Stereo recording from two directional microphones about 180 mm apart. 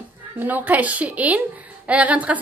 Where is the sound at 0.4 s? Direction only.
10° right (ahead or behind).